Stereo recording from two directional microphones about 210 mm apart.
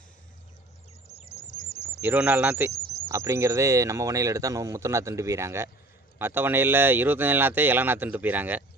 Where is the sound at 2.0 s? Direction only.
10° right (ahead or behind).